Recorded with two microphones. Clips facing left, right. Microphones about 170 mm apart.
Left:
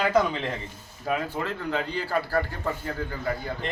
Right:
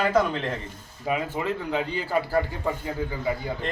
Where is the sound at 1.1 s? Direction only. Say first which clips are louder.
Right 2 dB; 5° right (ahead or behind).